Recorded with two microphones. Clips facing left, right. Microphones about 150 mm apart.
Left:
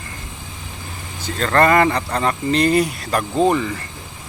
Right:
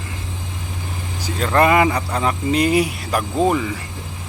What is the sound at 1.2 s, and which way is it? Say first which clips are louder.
Speech: even; 10° right (ahead or behind).